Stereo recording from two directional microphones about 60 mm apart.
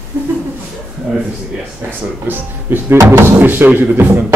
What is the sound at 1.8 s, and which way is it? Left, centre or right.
Speech, right.